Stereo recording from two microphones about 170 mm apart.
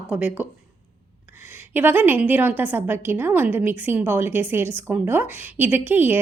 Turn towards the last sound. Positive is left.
turn(degrees=-10)  # may be behind; listen again after turning